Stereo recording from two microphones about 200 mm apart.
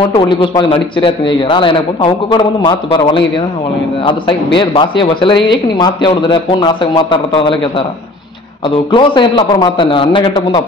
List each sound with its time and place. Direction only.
0.1 s a man's voice: 25° left (ahead or behind)